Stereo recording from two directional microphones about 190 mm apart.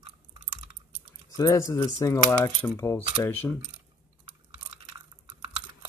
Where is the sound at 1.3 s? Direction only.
20° left (ahead or behind).